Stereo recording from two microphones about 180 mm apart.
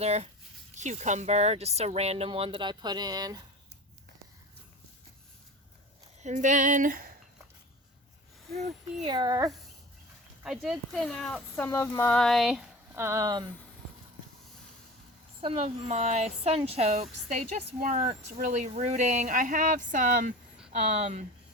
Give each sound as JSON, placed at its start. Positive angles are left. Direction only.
{"t": 0.0, "sound": "a woman's voice", "side_deg": -40}
{"t": 6.2, "sound": "speech", "side_deg": -40}
{"t": 9.0, "sound": "speech", "side_deg": -25}
{"t": 10.4, "sound": "speech", "side_deg": -5}
{"t": 13.0, "sound": "speech", "side_deg": -15}
{"t": 15.4, "sound": "a woman's voice", "side_deg": -35}